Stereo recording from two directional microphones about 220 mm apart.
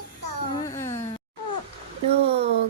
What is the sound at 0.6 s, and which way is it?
Baby cry, 15° left (ahead or behind).